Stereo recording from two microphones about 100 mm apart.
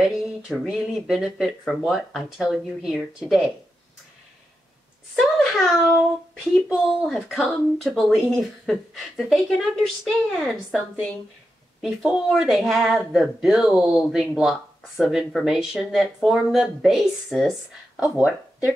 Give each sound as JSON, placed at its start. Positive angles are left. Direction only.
{"t": 0.5, "sound": "speech", "side_deg": 0}
{"t": 5.2, "sound": "speech", "side_deg": 0}